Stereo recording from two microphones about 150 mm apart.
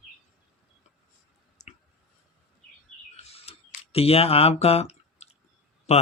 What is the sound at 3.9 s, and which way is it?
Speech, 40° left (ahead or behind).